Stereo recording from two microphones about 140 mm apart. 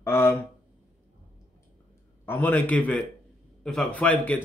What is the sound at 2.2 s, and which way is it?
Speech, 15° left (ahead or behind).